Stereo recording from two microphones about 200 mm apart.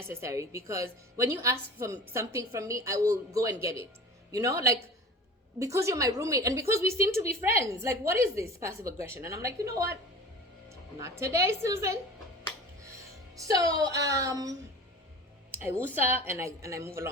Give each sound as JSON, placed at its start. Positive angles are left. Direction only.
{"t": 0.1, "sound": "a woman's voice", "side_deg": -15}
{"t": 13.3, "sound": "a woman's voice", "side_deg": -15}
{"t": 16.0, "sound": "a woman's voice", "side_deg": -10}